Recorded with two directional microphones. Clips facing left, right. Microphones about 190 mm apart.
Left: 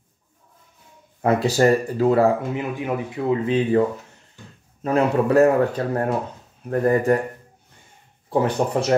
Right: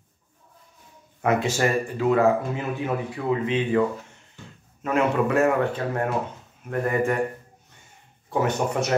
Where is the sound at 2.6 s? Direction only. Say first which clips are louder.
Left 2 dB; 15° left (ahead or behind).